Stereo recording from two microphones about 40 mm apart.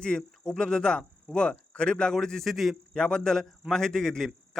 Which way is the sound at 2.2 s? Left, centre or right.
Centre.